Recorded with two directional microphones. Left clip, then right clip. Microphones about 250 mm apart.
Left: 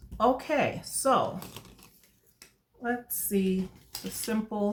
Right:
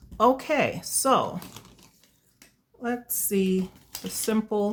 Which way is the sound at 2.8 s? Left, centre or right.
Right.